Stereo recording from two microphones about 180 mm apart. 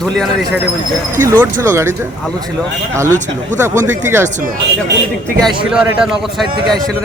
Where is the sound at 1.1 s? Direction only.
15° right (ahead or behind).